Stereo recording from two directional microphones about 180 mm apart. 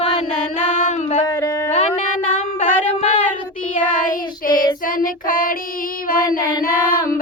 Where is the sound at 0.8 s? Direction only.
45° left (ahead or behind).